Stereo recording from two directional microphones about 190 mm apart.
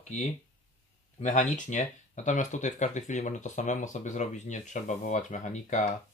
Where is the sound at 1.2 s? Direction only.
40° left (ahead or behind).